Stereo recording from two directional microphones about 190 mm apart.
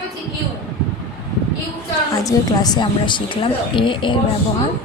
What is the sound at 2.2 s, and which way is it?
A woman's voice, 20° left (ahead or behind).